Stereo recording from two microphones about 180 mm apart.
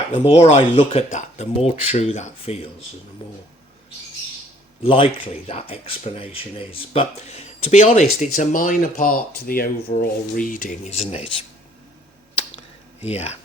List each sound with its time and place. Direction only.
0.3 s speech: 35° left (ahead or behind)
4.8 s speech: 30° left (ahead or behind)
11.1 s speech: 35° left (ahead or behind)
13.0 s speech: 35° left (ahead or behind)